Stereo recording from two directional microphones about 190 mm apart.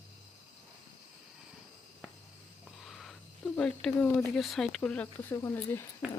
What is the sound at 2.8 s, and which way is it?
Speech, centre (ahead or behind).